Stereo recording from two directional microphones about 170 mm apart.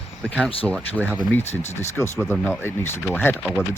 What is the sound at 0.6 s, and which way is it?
Speech, 10° left (ahead or behind).